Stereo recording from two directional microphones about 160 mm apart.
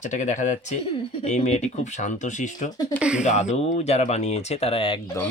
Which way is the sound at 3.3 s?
45° left (ahead or behind).